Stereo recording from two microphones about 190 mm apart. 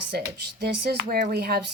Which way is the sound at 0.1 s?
55° right (ahead or behind).